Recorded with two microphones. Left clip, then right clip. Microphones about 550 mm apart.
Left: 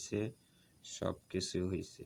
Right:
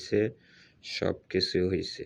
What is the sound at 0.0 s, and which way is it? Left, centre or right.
Speech, left.